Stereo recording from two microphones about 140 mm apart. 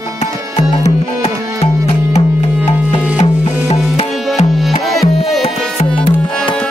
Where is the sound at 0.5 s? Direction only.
45° left (ahead or behind).